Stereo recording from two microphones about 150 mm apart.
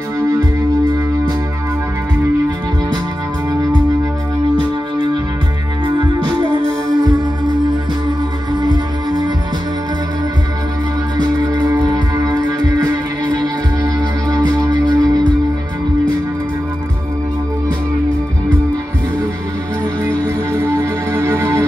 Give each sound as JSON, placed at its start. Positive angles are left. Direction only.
{"t": 5.9, "sound": "music", "side_deg": -30}
{"t": 11.1, "sound": "music", "side_deg": -25}
{"t": 20.5, "sound": "music", "side_deg": -20}